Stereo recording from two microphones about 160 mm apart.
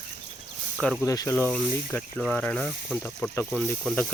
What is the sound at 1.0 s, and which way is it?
Speech, 20° left (ahead or behind).